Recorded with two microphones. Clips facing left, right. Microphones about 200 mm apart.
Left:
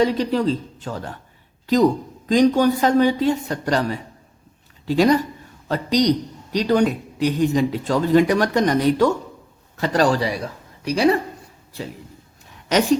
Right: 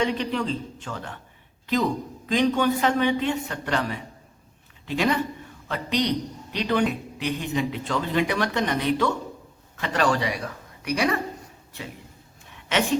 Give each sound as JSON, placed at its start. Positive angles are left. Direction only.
{"t": 0.0, "sound": "a woman's voice", "side_deg": 35}
{"t": 12.6, "sound": "speech", "side_deg": 40}